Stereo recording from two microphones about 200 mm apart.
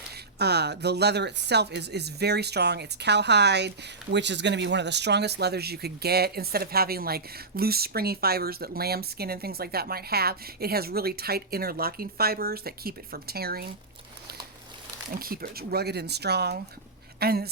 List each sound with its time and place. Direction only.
0.3 s speech: 55° right (ahead or behind)
15.1 s speech: 45° right (ahead or behind)